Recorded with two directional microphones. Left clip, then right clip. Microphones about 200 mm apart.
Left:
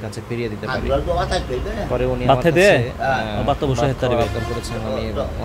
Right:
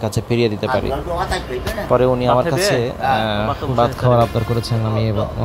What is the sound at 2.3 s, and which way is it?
Speech, 60° left (ahead or behind).